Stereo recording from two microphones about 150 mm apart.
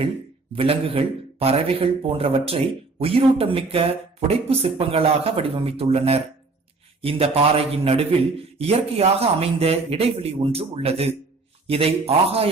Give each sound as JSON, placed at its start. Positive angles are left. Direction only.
{"t": 0.5, "sound": "a man's voice", "side_deg": -40}